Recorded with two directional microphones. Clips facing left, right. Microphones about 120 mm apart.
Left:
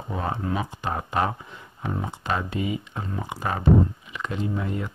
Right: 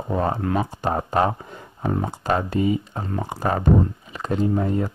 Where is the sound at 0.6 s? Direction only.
35° right (ahead or behind).